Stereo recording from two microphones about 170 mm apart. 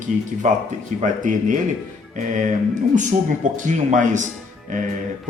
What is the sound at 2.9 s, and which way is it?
Speech, 45° right (ahead or behind).